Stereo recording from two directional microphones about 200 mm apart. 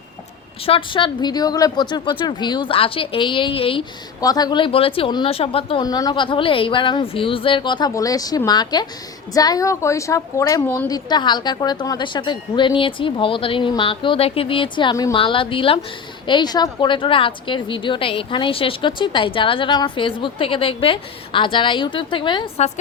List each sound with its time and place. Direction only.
0.6 s a woman's voice: 25° left (ahead or behind)